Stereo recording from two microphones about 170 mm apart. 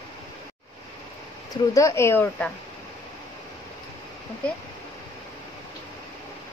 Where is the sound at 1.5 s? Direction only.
20° left (ahead or behind).